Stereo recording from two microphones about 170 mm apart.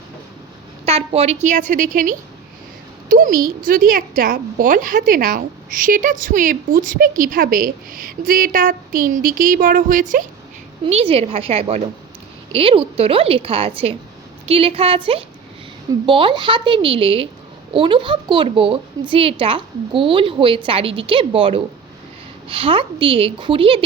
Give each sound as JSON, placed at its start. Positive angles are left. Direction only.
{"t": 0.9, "sound": "a woman's voice", "side_deg": -35}
{"t": 10.8, "sound": "a woman's voice", "side_deg": -35}